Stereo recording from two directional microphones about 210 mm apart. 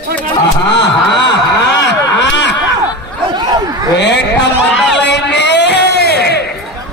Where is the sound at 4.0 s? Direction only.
55° left (ahead or behind).